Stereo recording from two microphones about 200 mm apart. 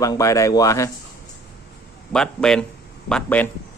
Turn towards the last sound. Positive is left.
turn(degrees=10)  # may be behind; listen again after turning